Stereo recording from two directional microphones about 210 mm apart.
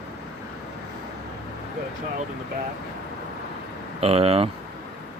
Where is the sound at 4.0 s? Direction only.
30° right (ahead or behind).